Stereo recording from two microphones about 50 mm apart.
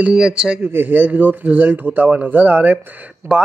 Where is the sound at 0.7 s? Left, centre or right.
Right.